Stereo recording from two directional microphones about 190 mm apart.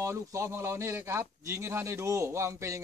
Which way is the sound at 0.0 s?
15° right (ahead or behind).